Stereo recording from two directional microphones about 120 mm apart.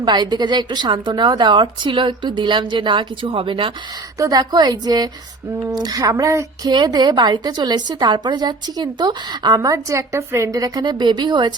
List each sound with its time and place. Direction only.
0.0 s a woman's voice: 35° right (ahead or behind)
4.2 s a woman's voice: 35° right (ahead or behind)
9.6 s a woman's voice: 25° right (ahead or behind)